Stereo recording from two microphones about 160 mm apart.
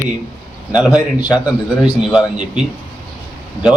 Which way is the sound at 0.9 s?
25° left (ahead or behind).